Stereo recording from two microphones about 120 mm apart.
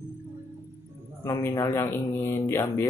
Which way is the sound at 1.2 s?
20° left (ahead or behind).